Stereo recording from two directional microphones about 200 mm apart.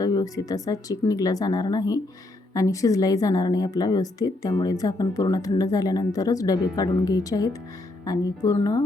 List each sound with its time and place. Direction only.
0.0 s a woman's voice: 20° left (ahead or behind)